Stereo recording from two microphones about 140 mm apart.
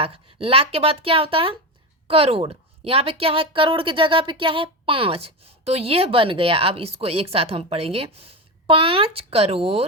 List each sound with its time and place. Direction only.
0.0 s a woman's voice: 40° right (ahead or behind)